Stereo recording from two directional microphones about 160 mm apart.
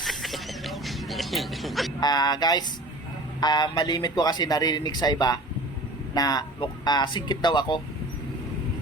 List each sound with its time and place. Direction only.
0.0 s music: centre (ahead or behind)
2.0 s speech: 25° left (ahead or behind)